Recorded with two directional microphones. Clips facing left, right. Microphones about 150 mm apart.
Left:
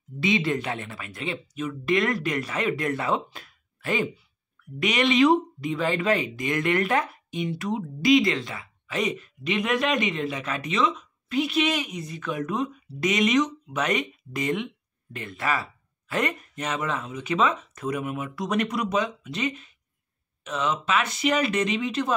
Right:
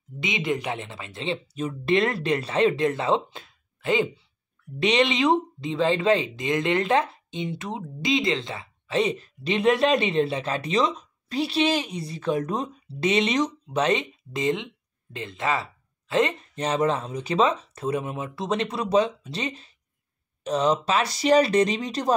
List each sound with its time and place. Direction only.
0.2 s speech: 20° right (ahead or behind); by 22.1 s 35° right (ahead or behind)